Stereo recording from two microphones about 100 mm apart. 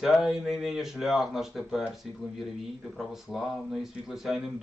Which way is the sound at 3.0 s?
Centre (ahead or behind).